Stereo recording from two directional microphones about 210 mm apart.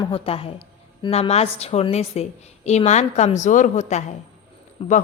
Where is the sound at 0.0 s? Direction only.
25° left (ahead or behind).